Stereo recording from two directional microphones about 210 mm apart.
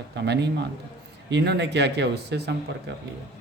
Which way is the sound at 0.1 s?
55° right (ahead or behind).